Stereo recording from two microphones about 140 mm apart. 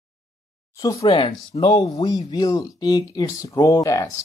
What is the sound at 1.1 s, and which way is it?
Speech, 40° left (ahead or behind).